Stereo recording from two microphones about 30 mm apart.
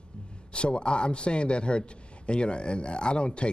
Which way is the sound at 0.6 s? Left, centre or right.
Left.